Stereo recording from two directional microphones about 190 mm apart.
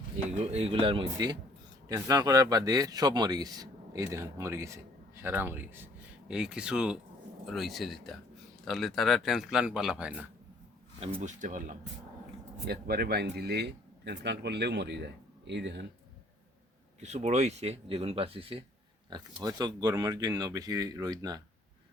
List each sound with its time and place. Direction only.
0.3 s speech: 35° right (ahead or behind); by 10.2 s 5° right (ahead or behind)
11.0 s speech: 35° right (ahead or behind)
12.6 s speech: 55° right (ahead or behind)
17.0 s speech: 35° right (ahead or behind); by 21.4 s 20° right (ahead or behind)